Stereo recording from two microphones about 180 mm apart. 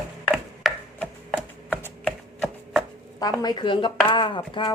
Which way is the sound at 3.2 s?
20° left (ahead or behind).